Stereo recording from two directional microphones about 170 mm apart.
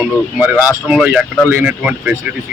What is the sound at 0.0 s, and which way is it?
Speech, 5° right (ahead or behind).